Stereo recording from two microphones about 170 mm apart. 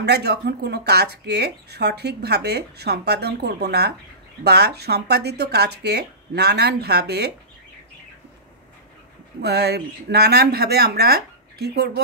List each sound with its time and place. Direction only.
0.0 s speech: 75° right (ahead or behind)
9.4 s speech: 75° right (ahead or behind)